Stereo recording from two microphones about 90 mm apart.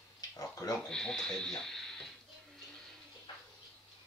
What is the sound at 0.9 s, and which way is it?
Speech, 5° left (ahead or behind).